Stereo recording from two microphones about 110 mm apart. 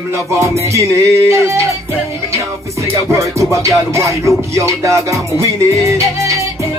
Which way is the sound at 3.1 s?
25° right (ahead or behind).